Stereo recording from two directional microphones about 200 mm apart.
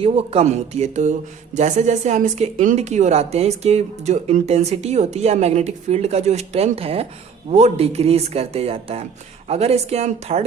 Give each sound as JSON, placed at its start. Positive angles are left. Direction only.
{"t": 0.0, "sound": "speech", "side_deg": -30}